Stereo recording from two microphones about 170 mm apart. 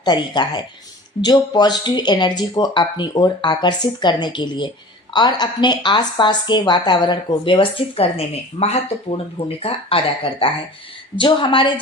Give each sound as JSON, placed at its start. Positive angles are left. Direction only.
{"t": 0.0, "sound": "a woman's voice", "side_deg": 25}